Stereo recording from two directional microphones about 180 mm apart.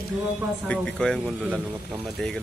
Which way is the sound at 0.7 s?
5° left (ahead or behind).